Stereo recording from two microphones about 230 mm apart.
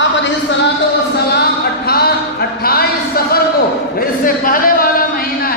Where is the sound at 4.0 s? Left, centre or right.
Left.